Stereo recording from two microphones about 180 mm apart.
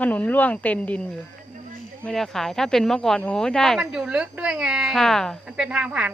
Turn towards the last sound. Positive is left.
turn(degrees=-5)  # may be behind; listen again after turning